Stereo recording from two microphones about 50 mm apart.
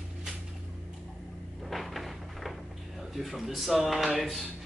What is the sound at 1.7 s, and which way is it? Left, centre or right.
Cupboard open or close, centre.